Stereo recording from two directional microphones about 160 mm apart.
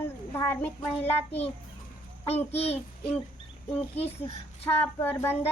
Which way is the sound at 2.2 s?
40° left (ahead or behind).